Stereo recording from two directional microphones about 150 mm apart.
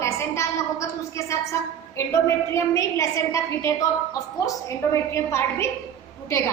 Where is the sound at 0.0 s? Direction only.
20° left (ahead or behind).